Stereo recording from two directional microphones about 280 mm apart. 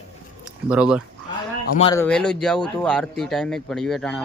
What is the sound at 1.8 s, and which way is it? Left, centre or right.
Speech, centre.